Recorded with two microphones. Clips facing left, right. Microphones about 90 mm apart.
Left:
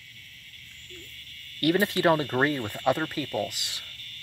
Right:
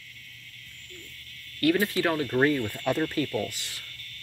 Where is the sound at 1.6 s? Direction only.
20° left (ahead or behind).